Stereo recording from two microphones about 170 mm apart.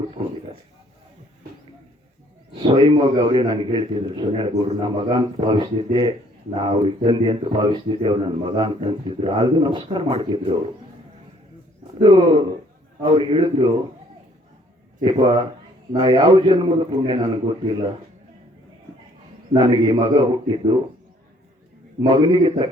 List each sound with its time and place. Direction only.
2.6 s a man's voice: 30° right (ahead or behind)
11.9 s a man's voice: 30° right (ahead or behind)
15.9 s a man's voice: 25° right (ahead or behind)
19.5 s a man's voice: 30° right (ahead or behind)
22.0 s a man's voice: 25° right (ahead or behind)